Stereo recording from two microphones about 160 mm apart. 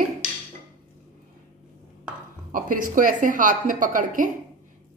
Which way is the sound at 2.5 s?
60° right (ahead or behind).